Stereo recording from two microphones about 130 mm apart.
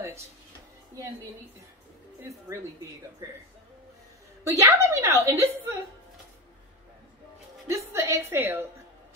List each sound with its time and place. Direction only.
3.2 s a woman's voice: 25° right (ahead or behind)
4.5 s a woman's voice: 20° right (ahead or behind)
7.6 s a woman's voice: 20° right (ahead or behind)